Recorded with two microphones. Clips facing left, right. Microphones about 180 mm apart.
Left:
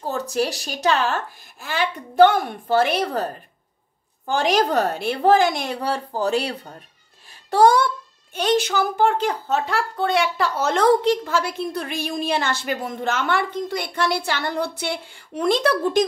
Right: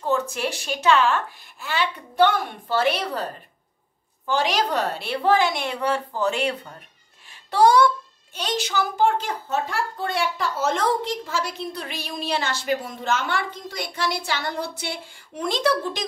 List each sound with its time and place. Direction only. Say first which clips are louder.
0.0 s a woman's voice: left 1 dB; 35° left (ahead or behind)
7.2 s music: left 2 dB; 50° left (ahead or behind)
8.4 s speech: left 6 dB; 55° left (ahead or behind)